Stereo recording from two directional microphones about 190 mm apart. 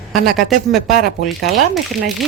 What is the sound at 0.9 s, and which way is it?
Speech, 50° left (ahead or behind).